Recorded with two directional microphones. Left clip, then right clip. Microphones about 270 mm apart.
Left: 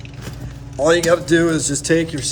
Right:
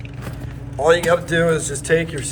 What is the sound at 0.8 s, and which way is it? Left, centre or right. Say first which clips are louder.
Speech: left 1 dB; left.